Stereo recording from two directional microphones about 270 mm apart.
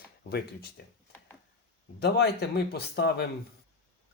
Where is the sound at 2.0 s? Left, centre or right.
Left.